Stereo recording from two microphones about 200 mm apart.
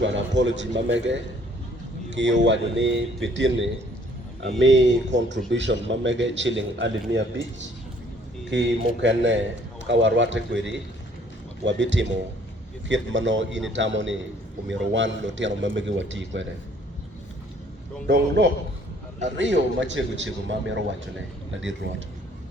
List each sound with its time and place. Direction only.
0.0 s a man's voice: 65° right (ahead or behind)
8.4 s a man's voice: 65° right (ahead or behind)
19.2 s a man's voice: 65° right (ahead or behind)